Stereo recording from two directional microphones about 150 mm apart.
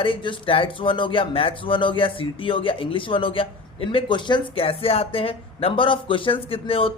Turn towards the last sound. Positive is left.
turn(degrees=40)  # may be behind; listen again after turning